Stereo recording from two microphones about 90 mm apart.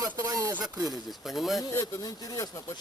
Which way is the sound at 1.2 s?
5° right (ahead or behind).